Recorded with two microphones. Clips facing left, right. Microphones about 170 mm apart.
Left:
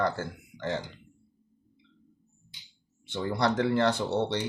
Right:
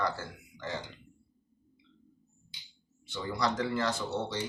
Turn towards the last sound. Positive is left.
turn(degrees=65)  # may be behind; listen again after turning